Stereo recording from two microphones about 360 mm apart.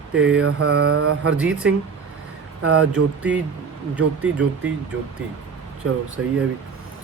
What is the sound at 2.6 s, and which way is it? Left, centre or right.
Mantra, right.